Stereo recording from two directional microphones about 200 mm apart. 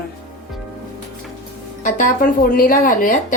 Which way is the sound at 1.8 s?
40° left (ahead or behind).